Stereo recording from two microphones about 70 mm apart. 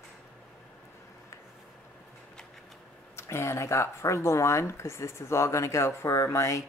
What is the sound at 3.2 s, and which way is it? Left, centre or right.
Speech, left.